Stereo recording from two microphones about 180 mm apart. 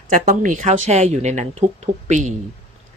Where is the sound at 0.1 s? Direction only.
45° right (ahead or behind).